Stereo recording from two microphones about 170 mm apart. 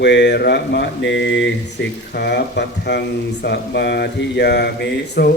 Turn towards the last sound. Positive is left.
turn(degrees=65)  # may be behind; listen again after turning